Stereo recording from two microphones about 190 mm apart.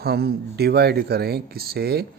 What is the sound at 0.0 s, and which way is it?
Speech, 55° right (ahead or behind).